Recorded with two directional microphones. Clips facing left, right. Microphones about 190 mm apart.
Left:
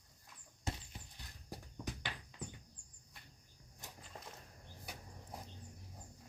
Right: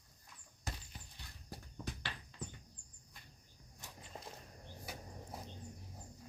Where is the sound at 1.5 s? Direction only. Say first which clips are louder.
Left 1 dB; 15° left (ahead or behind).